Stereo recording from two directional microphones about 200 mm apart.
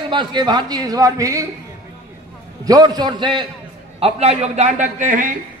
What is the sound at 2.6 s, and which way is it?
A man's voice, 20° right (ahead or behind).